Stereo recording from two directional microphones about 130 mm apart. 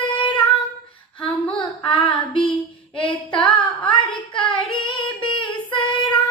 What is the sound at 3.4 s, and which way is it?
Female singing, 10° left (ahead or behind).